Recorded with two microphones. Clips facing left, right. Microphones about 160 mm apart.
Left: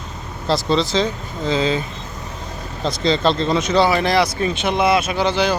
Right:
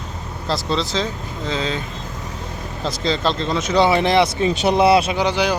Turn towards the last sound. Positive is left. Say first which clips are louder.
# left 1 dB
turn(degrees=-15)  # may be behind; listen again after turning